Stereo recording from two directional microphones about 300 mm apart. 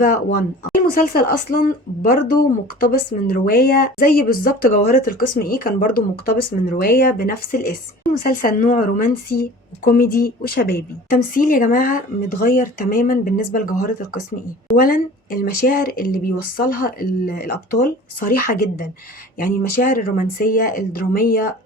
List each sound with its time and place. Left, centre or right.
0.7 s speech: left
14.8 s speech: left